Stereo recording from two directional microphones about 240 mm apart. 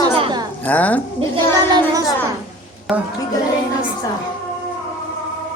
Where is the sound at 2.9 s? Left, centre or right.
Centre.